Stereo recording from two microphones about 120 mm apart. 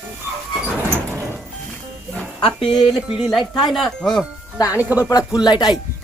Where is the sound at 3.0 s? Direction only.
5° right (ahead or behind).